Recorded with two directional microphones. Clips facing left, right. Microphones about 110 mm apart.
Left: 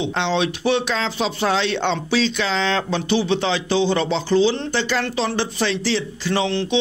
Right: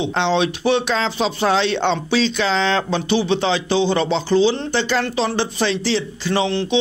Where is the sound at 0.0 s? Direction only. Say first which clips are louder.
Right 2 dB; 30° right (ahead or behind).